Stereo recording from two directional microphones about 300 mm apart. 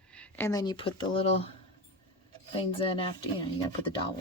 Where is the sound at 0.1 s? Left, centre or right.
Centre.